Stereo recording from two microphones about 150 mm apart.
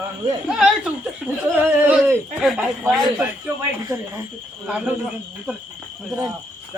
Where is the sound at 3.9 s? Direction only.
20° right (ahead or behind).